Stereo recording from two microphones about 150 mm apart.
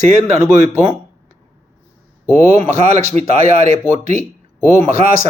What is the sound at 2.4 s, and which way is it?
A man's voice, 50° right (ahead or behind).